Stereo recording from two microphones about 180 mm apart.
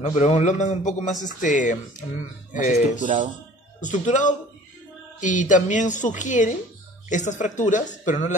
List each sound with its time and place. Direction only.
0.0 s a man's voice: 40° left (ahead or behind)
3.0 s speech: 45° right (ahead or behind)
3.8 s speech: 45° left (ahead or behind)